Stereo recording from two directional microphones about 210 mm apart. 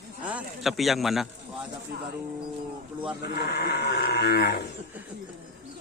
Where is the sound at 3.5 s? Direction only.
50° left (ahead or behind).